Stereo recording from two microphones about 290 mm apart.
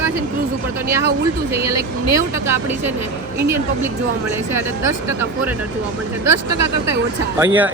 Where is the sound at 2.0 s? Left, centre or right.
Right.